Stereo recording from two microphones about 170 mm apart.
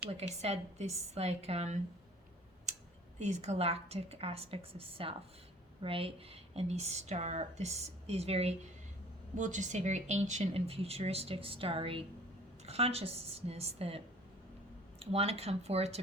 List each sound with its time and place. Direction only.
0.1 s speech: 40° right (ahead or behind)
2.7 s clicking: 45° right (ahead or behind)
3.2 s speech: 40° right (ahead or behind)